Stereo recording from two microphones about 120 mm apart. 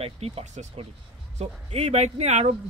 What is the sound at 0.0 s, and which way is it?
Speech, 60° right (ahead or behind).